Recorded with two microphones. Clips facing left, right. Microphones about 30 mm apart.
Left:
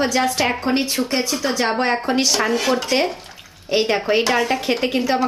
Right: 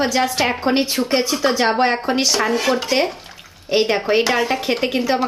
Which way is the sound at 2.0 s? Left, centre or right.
Centre.